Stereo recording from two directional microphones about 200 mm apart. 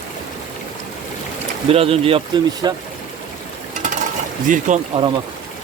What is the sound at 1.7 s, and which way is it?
Speech, 30° right (ahead or behind).